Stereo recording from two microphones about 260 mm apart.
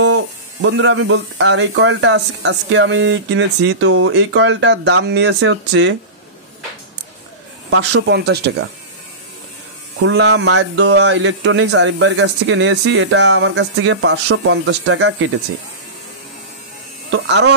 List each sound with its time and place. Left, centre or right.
0.7 s speech: right
7.7 s a man's voice: right
10.0 s speech: right
17.1 s a man's voice: right